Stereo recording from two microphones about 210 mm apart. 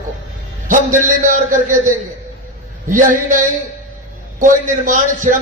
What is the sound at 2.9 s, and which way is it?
A man's voice, 40° right (ahead or behind).